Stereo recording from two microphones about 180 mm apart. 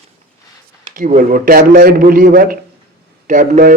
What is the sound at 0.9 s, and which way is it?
A man's voice, 50° right (ahead or behind).